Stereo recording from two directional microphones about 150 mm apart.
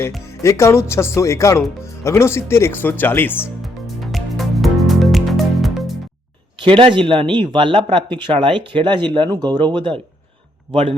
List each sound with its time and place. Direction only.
0.3 s speech: 20° left (ahead or behind)
3.6 s music: centre (ahead or behind)
6.7 s speech: 35° right (ahead or behind)